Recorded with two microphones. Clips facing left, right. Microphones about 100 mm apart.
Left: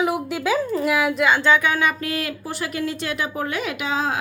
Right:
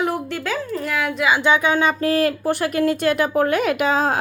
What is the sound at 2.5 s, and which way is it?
A woman's voice, 55° right (ahead or behind).